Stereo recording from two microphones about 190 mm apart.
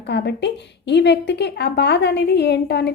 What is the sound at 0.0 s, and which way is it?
A woman's voice, 65° left (ahead or behind).